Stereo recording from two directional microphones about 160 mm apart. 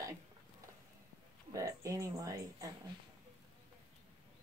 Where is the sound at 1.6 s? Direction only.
20° right (ahead or behind).